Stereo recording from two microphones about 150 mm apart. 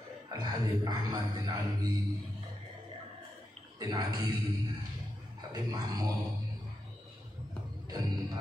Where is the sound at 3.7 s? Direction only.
25° right (ahead or behind).